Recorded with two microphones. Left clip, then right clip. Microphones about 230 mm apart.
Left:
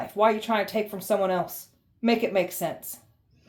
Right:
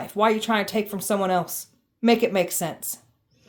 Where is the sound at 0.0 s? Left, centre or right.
Right.